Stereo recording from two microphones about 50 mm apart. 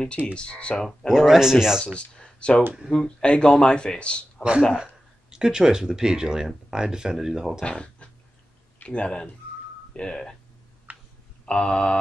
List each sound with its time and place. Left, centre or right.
0.3 s speech: left
0.8 s speech: centre
2.1 s a sound: left
3.2 s speech: left
4.4 s speech: centre
7.6 s a sound: left
8.8 s speech: left
10.9 s a sound: right
11.4 s speech: centre